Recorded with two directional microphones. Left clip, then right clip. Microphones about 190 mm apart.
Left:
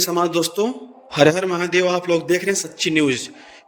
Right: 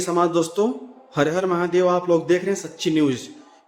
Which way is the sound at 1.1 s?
45° left (ahead or behind).